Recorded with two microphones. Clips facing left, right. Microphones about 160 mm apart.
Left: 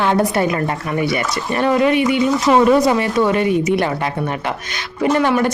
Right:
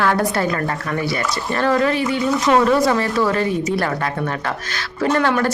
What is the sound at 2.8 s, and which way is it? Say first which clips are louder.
A woman's voice: left 2 dB; 20° left (ahead or behind).